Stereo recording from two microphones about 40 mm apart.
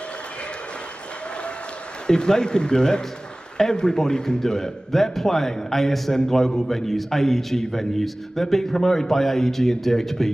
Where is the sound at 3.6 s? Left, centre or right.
Centre.